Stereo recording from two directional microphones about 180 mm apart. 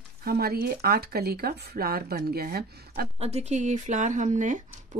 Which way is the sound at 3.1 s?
35° right (ahead or behind).